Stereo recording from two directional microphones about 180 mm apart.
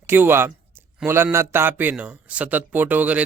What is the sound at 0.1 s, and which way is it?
A man's voice, 10° right (ahead or behind).